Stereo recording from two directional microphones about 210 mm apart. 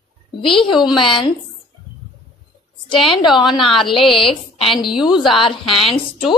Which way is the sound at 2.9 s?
25° left (ahead or behind).